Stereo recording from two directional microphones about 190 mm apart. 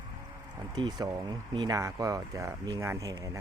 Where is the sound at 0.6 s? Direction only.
20° right (ahead or behind).